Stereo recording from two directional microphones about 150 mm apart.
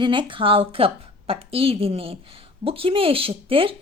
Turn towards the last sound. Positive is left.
turn(degrees=-35)  # may be behind; listen again after turning